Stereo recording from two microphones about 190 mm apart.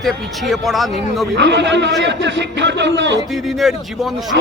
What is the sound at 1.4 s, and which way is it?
A man's voice, 65° right (ahead or behind).